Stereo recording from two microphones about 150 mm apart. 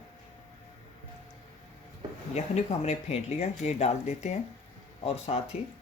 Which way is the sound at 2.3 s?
45° left (ahead or behind).